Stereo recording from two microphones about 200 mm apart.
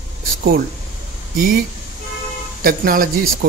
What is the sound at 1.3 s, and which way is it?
Speech, 50° right (ahead or behind).